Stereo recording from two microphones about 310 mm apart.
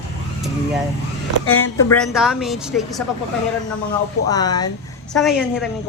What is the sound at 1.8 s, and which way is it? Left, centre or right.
A man's voice, centre.